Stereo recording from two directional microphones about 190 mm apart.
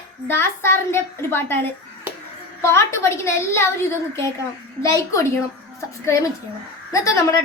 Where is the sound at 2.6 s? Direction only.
15° left (ahead or behind).